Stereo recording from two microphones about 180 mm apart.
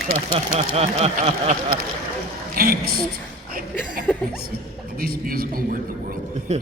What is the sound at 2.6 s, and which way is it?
Speech, 55° right (ahead or behind).